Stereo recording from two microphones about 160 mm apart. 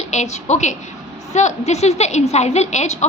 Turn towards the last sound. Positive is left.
turn(degrees=45)  # may be behind; listen again after turning